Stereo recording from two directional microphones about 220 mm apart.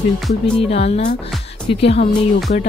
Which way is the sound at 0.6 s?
25° left (ahead or behind).